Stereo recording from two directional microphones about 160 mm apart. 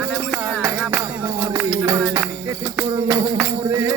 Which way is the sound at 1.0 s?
30° right (ahead or behind).